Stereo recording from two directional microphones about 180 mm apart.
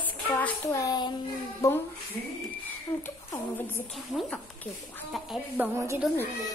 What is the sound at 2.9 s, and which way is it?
Speech, 10° left (ahead or behind).